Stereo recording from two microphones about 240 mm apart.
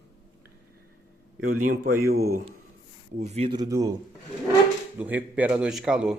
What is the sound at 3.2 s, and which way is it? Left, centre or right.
Speech, right.